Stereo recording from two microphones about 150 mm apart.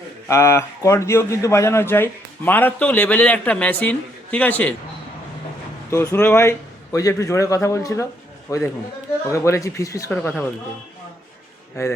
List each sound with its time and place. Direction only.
0.3 s a man's voice: 20° left (ahead or behind)
5.9 s a man's voice: 15° left (ahead or behind)
11.8 s a man's voice: 20° left (ahead or behind)